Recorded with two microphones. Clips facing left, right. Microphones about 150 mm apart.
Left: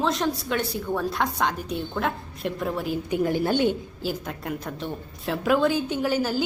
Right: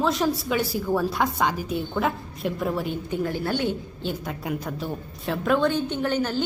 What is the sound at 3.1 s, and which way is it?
Speech, 15° left (ahead or behind).